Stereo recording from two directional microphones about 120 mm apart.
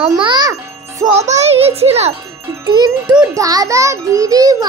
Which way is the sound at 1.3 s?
60° right (ahead or behind).